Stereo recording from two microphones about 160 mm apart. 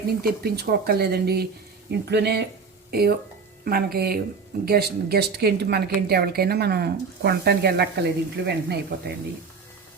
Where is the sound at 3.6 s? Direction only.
70° right (ahead or behind); by 9.1 s 90° right.